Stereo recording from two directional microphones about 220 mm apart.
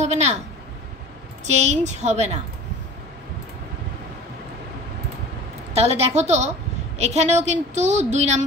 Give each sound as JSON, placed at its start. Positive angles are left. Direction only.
{"t": 0.0, "sound": "a woman's voice", "side_deg": -30}
{"t": 1.4, "sound": "a woman's voice", "side_deg": -30}
{"t": 5.7, "sound": "a woman's voice", "side_deg": -30}